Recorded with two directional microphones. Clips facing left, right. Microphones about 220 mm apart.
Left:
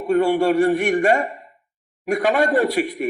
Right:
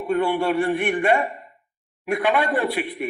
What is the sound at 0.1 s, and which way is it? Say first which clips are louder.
Speech: left 4 dB; 40° left (ahead or behind).